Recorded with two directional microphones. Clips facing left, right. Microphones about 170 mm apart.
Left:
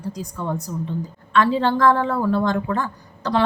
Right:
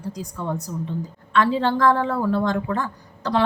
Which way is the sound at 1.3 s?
15° right (ahead or behind).